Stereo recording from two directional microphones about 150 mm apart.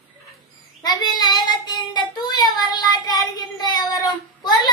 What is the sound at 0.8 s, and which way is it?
Child singing, 25° left (ahead or behind).